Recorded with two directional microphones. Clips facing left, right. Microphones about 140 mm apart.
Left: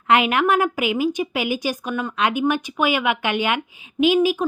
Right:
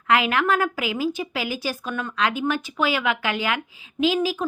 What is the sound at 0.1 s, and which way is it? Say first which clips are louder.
A woman's voice: left 3 dB; 20° left (ahead or behind).